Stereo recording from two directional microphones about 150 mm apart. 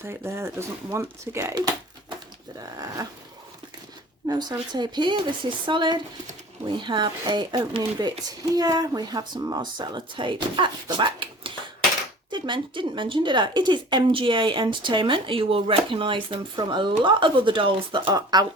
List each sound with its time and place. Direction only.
0.0 s speech: 15° right (ahead or behind)
1.5 s a sound: 30° right (ahead or behind)
2.6 s speech: 25° right (ahead or behind)
4.3 s speech: 25° right (ahead or behind)